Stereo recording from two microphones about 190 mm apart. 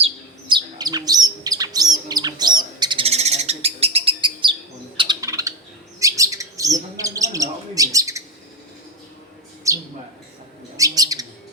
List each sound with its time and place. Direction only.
0.0 s bird: 25° right (ahead or behind)
9.7 s bird: 15° right (ahead or behind)